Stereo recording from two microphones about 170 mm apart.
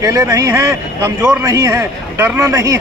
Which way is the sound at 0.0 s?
20° right (ahead or behind).